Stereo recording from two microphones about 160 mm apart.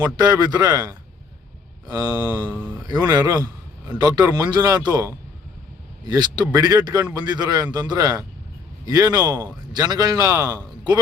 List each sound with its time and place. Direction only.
0.0 s a man's voice: 20° right (ahead or behind)